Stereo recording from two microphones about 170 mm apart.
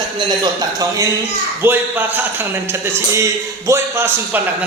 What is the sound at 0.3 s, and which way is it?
Speech, 25° right (ahead or behind).